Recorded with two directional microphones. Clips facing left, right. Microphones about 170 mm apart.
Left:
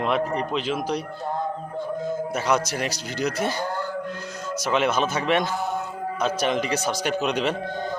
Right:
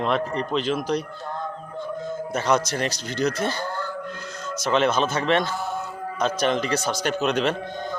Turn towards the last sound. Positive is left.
turn(degrees=10)  # may be behind; listen again after turning